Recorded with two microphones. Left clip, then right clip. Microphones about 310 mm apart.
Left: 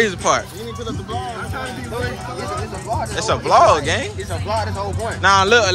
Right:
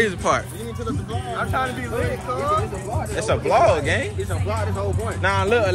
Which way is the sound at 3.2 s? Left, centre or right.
Centre.